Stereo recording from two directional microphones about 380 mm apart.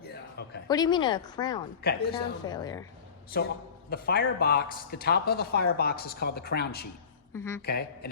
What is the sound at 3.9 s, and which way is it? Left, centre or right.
Speech, left.